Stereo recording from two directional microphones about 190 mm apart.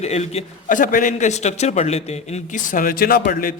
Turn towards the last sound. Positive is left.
turn(degrees=50)  # may be behind; listen again after turning